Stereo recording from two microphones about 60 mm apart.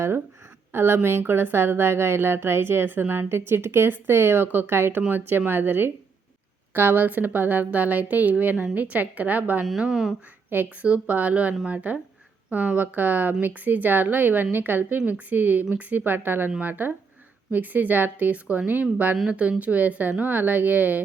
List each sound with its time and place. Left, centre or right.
0.7 s a woman's voice: right
9.6 s speech: centre
10.5 s a woman's voice: right